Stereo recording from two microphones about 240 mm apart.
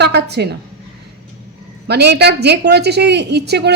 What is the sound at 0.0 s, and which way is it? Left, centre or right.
Speech, right.